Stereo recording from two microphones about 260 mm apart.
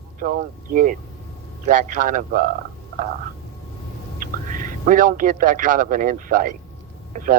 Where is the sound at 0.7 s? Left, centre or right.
Right.